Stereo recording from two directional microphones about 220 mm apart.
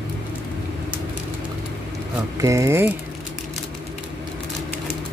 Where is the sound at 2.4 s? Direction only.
15° right (ahead or behind).